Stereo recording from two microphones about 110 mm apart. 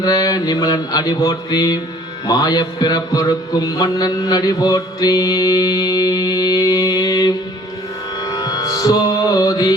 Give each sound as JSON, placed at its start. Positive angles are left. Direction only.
{"t": 0.0, "sound": "mantra", "side_deg": 35}
{"t": 8.2, "sound": "music", "side_deg": 35}